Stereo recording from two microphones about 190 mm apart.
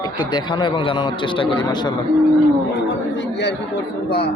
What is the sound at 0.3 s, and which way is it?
A man's voice, 25° left (ahead or behind).